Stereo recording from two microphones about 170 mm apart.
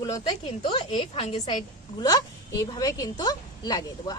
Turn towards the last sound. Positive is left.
turn(degrees=25)  # may be behind; listen again after turning